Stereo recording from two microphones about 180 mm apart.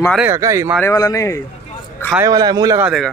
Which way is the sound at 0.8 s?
15° left (ahead or behind).